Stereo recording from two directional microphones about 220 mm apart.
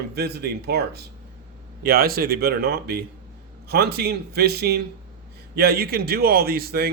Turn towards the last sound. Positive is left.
turn(degrees=-45)  # may be behind; listen again after turning